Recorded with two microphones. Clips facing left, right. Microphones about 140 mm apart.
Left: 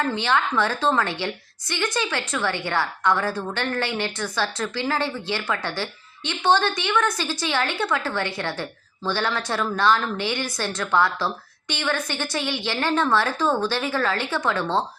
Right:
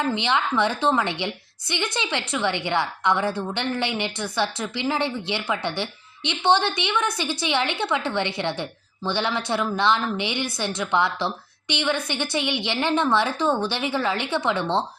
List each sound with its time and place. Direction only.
0.0 s a woman's voice: 15° right (ahead or behind)